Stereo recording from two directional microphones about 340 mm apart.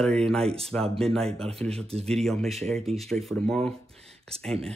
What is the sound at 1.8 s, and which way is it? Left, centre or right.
Speech, centre.